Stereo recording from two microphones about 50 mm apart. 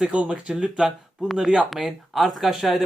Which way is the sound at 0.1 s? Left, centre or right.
Right.